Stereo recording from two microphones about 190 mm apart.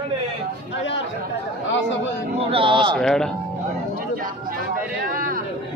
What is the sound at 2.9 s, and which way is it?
Speech, 5° left (ahead or behind).